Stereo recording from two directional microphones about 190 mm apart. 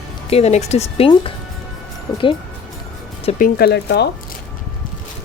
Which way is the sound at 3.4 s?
50° left (ahead or behind).